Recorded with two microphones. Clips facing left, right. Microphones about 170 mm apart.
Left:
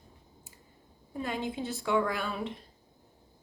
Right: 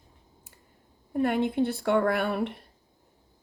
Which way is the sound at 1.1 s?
60° right (ahead or behind).